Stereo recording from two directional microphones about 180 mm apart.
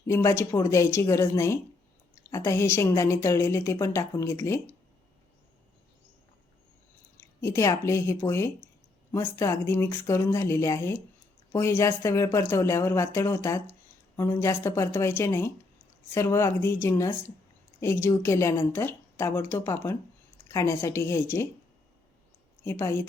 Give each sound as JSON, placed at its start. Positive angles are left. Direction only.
{"t": 0.1, "sound": "a woman's voice", "side_deg": 15}
{"t": 7.2, "sound": "a woman's voice", "side_deg": 15}
{"t": 22.6, "sound": "a woman's voice", "side_deg": 15}